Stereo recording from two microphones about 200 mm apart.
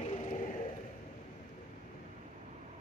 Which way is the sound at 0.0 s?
35° left (ahead or behind).